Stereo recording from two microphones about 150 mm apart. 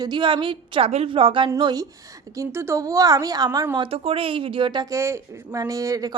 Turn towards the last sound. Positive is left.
turn(degrees=-25)  # may be behind; listen again after turning